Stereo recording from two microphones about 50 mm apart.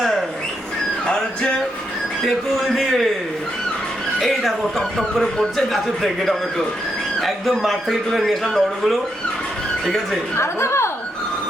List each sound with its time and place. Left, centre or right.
1.0 s music: centre
2.2 s speech: centre
4.2 s speech: centre
10.3 s a woman's voice: left